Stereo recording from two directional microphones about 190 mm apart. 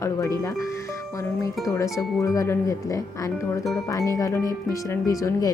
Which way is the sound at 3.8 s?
15° left (ahead or behind).